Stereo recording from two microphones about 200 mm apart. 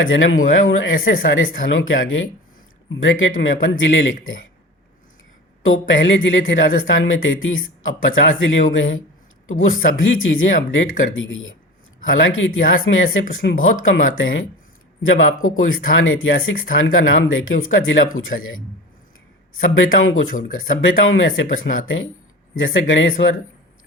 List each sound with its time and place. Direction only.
0.0 s speech: 75° left (ahead or behind)
5.6 s speech: 75° left (ahead or behind)
13.4 s speech: 60° left (ahead or behind)
13.8 s speech: 85° left